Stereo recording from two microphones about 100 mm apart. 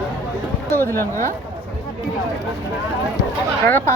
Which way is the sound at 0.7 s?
25° left (ahead or behind).